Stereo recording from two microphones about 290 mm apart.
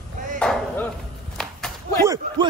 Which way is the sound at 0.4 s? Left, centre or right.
Centre.